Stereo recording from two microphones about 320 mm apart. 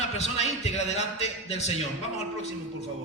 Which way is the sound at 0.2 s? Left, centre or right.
Centre.